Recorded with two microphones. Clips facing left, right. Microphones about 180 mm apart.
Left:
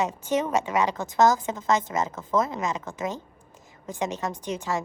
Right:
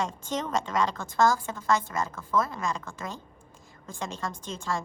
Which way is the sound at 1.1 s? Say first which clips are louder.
Left 4 dB; 20° left (ahead or behind).